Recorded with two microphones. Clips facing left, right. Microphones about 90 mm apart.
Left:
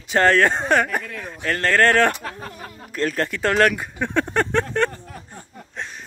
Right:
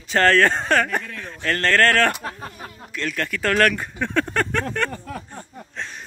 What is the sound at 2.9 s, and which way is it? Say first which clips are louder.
Speech: left 4 dB; 35° left (ahead or behind).